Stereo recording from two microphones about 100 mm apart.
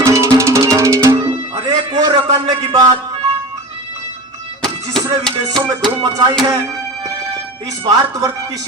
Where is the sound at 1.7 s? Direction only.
40° right (ahead or behind).